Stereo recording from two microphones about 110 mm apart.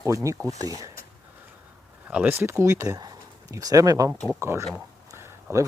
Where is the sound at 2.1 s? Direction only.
15° right (ahead or behind).